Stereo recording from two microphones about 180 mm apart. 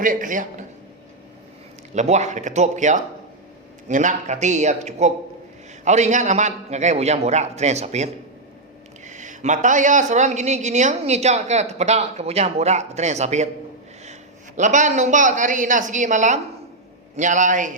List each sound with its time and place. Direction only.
0.0 s a man's voice: 45° right (ahead or behind)
1.9 s a man's voice: 40° right (ahead or behind)